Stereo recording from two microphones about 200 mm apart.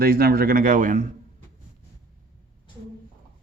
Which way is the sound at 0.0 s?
50° right (ahead or behind).